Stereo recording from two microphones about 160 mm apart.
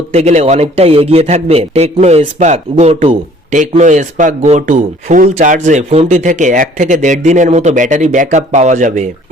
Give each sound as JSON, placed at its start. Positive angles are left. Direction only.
{"t": 0.1, "sound": "a man's voice", "side_deg": -45}